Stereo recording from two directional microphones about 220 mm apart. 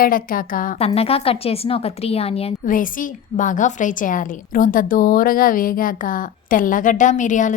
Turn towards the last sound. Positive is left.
turn(degrees=35)  # may be behind; listen again after turning